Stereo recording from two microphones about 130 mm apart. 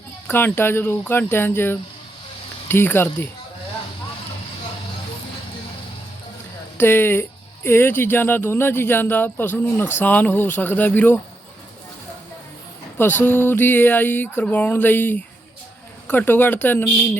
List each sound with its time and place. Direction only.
0.3 s speech: 15° left (ahead or behind)
6.7 s speech: 15° left (ahead or behind)
13.0 s speech: 15° left (ahead or behind)